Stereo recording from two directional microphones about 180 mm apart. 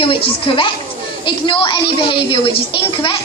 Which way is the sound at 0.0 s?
30° left (ahead or behind).